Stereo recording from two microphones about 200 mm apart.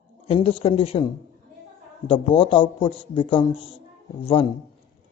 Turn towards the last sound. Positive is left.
turn(degrees=25)  # may be behind; listen again after turning